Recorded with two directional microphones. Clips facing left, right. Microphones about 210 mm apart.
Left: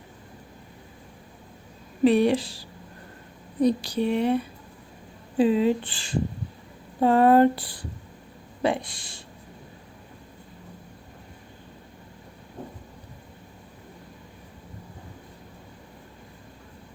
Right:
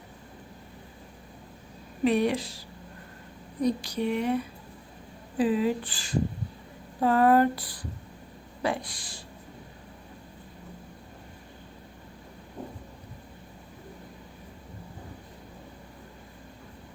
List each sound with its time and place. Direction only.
2.0 s speech: 30° left (ahead or behind)
5.4 s speech: 25° left (ahead or behind)